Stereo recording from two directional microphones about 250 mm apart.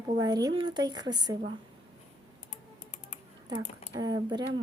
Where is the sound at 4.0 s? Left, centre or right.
Centre.